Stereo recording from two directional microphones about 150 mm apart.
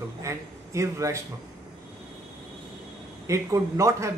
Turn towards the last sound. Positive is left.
turn(degrees=-20)  # may be behind; listen again after turning